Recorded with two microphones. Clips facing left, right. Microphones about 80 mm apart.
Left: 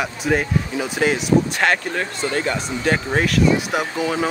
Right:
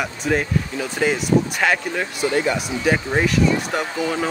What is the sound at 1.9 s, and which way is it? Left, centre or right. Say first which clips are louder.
Speech: right 2 dB; centre.